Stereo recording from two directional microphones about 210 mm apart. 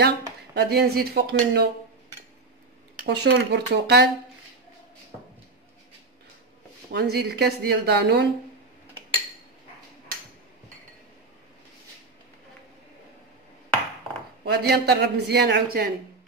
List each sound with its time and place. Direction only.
0.6 s a man's voice: 50° right (ahead or behind)
3.1 s a man's voice: 50° right (ahead or behind)
6.9 s a man's voice: 50° right (ahead or behind)
14.4 s a man's voice: 50° right (ahead or behind)